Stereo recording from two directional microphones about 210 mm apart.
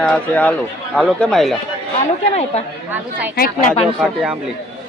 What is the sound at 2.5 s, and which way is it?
Speech, 30° left (ahead or behind).